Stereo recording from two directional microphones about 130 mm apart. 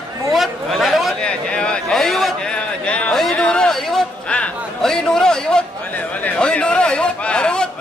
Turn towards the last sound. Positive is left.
turn(degrees=5)  # may be behind; listen again after turning